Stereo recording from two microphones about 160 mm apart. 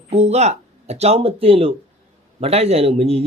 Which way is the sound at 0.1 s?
40° right (ahead or behind).